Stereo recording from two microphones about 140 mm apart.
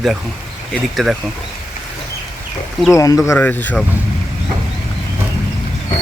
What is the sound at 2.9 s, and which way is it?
Speech, 25° left (ahead or behind).